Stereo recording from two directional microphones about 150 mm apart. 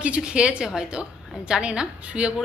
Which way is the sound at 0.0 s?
5° right (ahead or behind).